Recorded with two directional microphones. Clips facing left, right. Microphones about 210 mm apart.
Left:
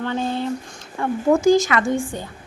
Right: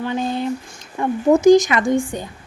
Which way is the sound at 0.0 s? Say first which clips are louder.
Right 2 dB; 15° right (ahead or behind).